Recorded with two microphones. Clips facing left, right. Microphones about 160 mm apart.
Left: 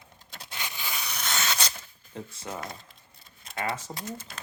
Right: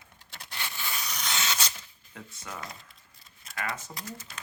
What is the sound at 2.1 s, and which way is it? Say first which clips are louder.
Speech: left 5 dB; 30° left (ahead or behind).